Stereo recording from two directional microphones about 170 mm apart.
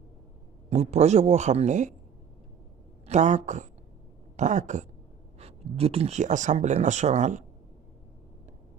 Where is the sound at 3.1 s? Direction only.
40° right (ahead or behind).